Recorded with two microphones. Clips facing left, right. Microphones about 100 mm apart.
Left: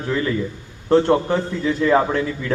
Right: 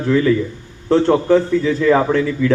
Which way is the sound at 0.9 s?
20° left (ahead or behind).